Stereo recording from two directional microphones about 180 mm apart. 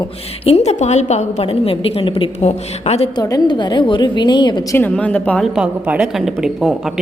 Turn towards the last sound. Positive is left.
turn(degrees=0)  # may be behind; listen again after turning